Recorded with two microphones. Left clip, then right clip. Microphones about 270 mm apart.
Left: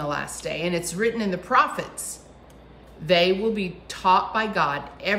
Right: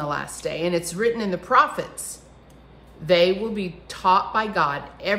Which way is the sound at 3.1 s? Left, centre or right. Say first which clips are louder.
Right 1 dB; centre.